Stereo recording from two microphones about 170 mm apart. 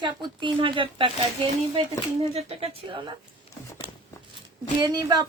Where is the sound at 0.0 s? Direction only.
25° right (ahead or behind).